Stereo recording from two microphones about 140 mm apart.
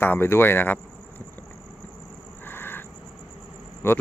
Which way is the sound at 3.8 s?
15° left (ahead or behind).